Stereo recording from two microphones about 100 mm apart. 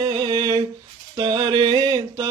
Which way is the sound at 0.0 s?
50° right (ahead or behind).